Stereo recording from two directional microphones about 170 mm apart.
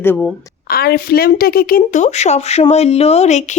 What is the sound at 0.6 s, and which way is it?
A woman's voice, 65° left (ahead or behind).